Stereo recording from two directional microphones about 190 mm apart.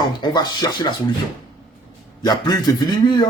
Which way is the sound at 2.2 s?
20° left (ahead or behind).